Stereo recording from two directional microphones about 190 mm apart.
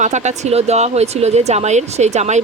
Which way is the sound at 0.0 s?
40° right (ahead or behind).